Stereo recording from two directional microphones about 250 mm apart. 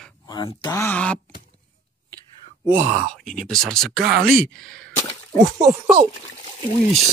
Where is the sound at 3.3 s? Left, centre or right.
Centre.